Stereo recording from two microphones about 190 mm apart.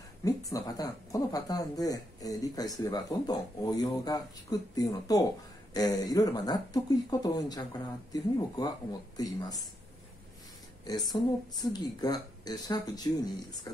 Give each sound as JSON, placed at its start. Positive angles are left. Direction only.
{"t": 0.2, "sound": "speech", "side_deg": 20}
{"t": 10.9, "sound": "speech", "side_deg": 20}